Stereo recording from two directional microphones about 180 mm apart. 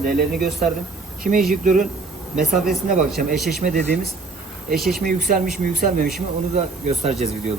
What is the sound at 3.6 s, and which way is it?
Speech, 45° right (ahead or behind).